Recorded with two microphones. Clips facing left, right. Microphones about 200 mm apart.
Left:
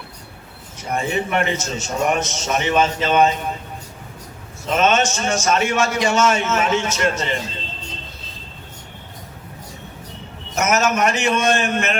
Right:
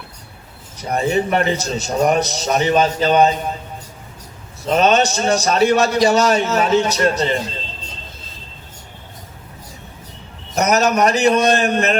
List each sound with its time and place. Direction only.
0.8 s a man's voice: 35° right (ahead or behind)
4.6 s a man's voice: 35° right (ahead or behind)
10.5 s a man's voice: 35° right (ahead or behind)